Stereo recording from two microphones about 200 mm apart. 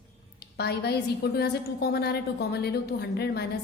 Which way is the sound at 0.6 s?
55° left (ahead or behind).